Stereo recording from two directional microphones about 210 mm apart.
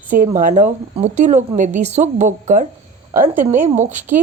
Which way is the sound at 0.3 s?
40° right (ahead or behind).